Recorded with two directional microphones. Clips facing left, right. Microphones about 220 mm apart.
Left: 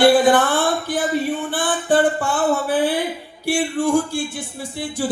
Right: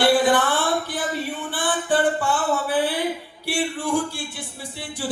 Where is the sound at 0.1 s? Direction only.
45° left (ahead or behind).